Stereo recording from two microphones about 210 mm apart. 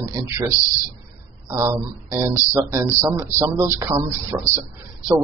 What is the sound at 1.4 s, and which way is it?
Speech, 15° right (ahead or behind).